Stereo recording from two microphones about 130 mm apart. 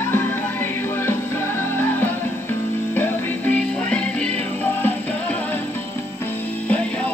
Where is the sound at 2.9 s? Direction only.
15° left (ahead or behind).